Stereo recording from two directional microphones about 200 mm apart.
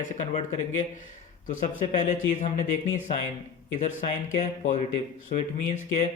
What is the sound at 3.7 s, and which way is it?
Speech, 35° left (ahead or behind).